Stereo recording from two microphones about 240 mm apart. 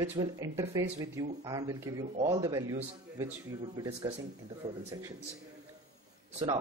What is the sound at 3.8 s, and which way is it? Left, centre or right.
Speech, centre.